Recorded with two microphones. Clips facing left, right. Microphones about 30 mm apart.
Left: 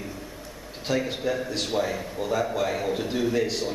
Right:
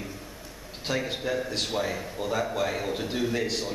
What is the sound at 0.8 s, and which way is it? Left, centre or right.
A man's voice, centre.